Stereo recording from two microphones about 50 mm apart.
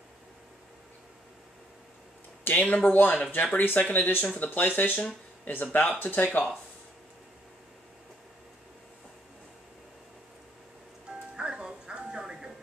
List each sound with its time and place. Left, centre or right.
2.4 s speech: left
11.1 s music: centre